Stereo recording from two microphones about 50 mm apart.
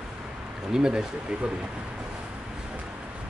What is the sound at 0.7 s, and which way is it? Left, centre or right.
Speech, centre.